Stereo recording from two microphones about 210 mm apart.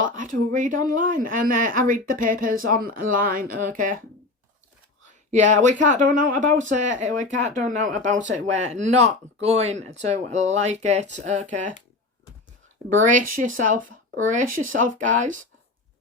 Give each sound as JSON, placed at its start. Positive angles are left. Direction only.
{"t": 0.0, "sound": "speech", "side_deg": -40}
{"t": 5.3, "sound": "speech", "side_deg": -35}
{"t": 13.1, "sound": "speech", "side_deg": -40}